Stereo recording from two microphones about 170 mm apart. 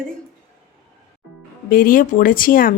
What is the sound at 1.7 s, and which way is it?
Speech, 55° left (ahead or behind).